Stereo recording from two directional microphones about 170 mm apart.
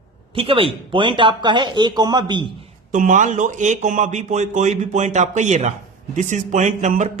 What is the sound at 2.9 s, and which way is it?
Speech, 45° right (ahead or behind).